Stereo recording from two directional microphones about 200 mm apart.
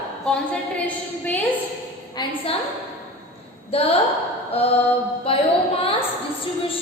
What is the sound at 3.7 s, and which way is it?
Speech, 30° left (ahead or behind).